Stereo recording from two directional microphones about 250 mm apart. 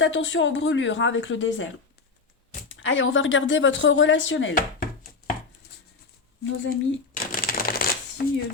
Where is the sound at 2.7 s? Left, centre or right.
Left.